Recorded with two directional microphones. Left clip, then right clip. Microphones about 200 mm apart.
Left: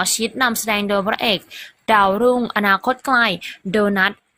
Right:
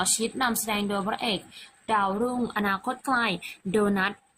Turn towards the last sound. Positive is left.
turn(degrees=30)  # may be behind; listen again after turning